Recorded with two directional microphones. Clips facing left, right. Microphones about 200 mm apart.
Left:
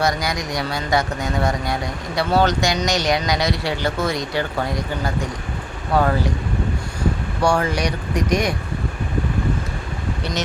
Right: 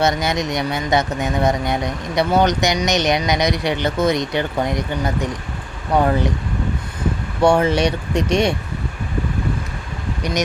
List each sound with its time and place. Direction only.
0.0 s speech: 25° right (ahead or behind)
7.4 s speech: 25° right (ahead or behind)